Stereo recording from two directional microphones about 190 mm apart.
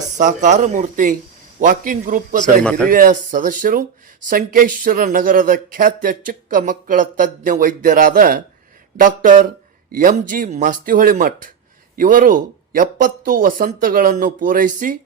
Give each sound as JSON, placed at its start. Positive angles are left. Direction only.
{"t": 0.2, "sound": "speech", "side_deg": -40}
{"t": 2.6, "sound": "a man's voice", "side_deg": 5}
{"t": 2.9, "sound": "speech", "side_deg": -45}